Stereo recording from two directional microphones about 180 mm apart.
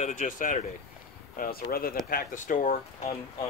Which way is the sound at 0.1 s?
45° left (ahead or behind).